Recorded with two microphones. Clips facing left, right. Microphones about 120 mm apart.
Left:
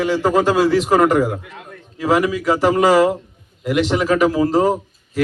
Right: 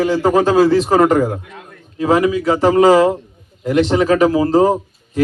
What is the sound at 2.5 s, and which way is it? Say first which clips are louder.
Speech: right 3 dB; 30° right (ahead or behind).